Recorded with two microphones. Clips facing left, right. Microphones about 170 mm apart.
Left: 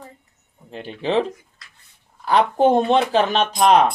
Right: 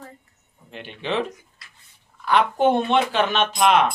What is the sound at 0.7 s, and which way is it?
Speech, 35° left (ahead or behind).